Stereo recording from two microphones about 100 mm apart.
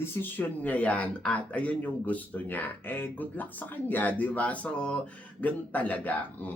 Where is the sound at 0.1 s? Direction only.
20° left (ahead or behind).